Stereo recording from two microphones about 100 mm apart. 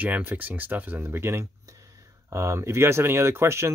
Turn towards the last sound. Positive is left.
turn(degrees=-25)  # may be behind; listen again after turning